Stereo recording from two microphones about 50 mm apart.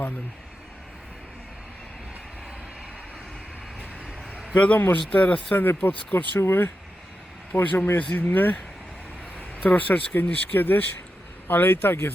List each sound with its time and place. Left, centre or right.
4.5 s speech: left
5.5 s speech: left
6.4 s speech: left
7.5 s speech: left
9.6 s speech: left